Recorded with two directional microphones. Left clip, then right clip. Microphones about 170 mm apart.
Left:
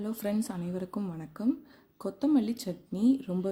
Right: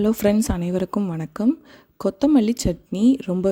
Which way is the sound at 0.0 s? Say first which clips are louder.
Right 14 dB; 50° right (ahead or behind).